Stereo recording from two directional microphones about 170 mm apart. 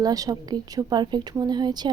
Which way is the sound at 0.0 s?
20° right (ahead or behind).